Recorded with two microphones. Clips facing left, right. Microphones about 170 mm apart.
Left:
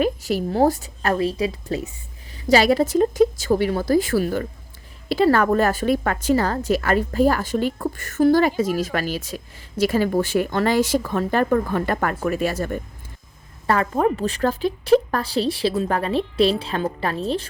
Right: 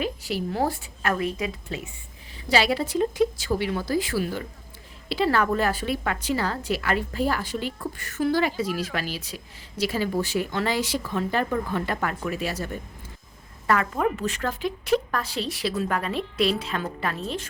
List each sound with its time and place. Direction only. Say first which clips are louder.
0.0 s a woman's voice: left 7 dB; 45° left (ahead or behind)
13.7 s a woman's voice: left 4 dB; 35° left (ahead or behind)